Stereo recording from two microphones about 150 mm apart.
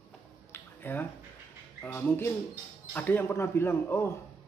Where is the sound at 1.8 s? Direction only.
15° left (ahead or behind).